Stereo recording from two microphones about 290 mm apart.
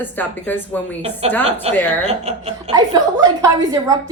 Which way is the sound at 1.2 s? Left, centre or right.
Right.